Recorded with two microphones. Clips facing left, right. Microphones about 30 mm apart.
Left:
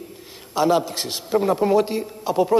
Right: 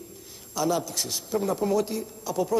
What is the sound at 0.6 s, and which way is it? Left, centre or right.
A man's voice, left.